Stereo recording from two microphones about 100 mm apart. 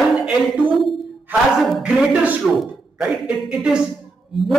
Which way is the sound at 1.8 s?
10° right (ahead or behind).